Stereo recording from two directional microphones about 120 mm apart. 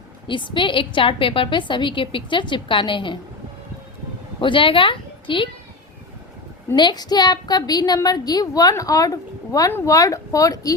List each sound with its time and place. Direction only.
0.3 s a woman's voice: 45° left (ahead or behind)
4.4 s a woman's voice: 45° left (ahead or behind)
6.7 s a woman's voice: 35° left (ahead or behind)